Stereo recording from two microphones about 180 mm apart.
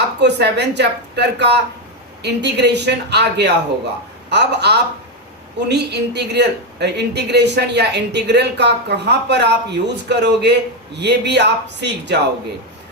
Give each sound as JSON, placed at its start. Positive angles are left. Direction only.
{"t": 0.2, "sound": "a woman's voice", "side_deg": -70}